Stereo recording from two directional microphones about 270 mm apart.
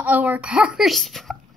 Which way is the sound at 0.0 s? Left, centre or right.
Centre.